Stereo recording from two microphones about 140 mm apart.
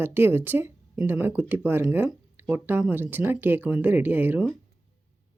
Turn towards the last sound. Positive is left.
turn(degrees=-15)  # may be behind; listen again after turning